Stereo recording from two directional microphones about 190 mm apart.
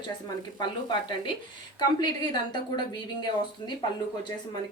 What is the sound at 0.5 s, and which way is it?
A woman's voice, 25° left (ahead or behind).